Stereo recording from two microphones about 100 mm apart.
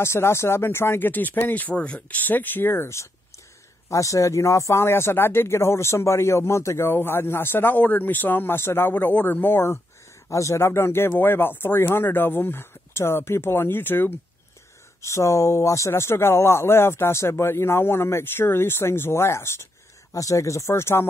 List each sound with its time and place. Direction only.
0.0 s speech: 25° left (ahead or behind)